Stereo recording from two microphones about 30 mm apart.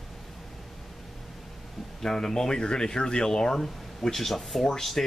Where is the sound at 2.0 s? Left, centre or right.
Centre.